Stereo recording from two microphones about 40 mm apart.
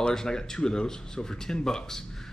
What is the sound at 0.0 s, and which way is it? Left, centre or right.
Speech, centre.